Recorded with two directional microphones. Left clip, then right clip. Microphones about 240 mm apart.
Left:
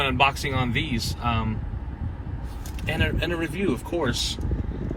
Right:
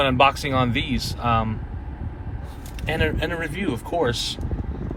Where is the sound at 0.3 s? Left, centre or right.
Right.